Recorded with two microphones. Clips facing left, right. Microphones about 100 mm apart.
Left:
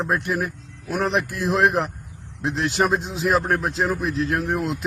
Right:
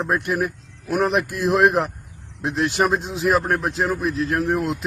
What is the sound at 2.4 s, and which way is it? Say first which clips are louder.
A man's voice: right 1 dB; centre (ahead or behind).